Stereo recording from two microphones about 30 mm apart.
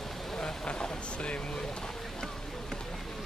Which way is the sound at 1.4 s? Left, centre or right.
Left.